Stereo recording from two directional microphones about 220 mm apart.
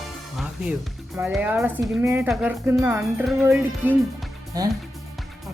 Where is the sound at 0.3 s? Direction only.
5° right (ahead or behind).